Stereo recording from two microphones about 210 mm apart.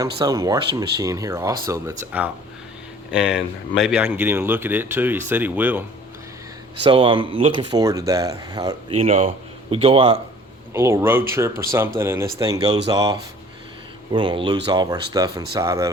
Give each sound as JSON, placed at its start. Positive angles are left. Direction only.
{"t": 0.2, "sound": "speech", "side_deg": -15}
{"t": 6.8, "sound": "speech", "side_deg": -25}
{"t": 9.0, "sound": "speech", "side_deg": -30}
{"t": 10.8, "sound": "speech", "side_deg": -15}